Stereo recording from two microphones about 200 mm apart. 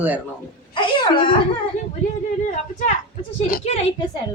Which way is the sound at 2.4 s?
35° left (ahead or behind).